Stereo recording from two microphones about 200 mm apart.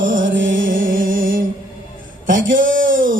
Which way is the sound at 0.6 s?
45° right (ahead or behind).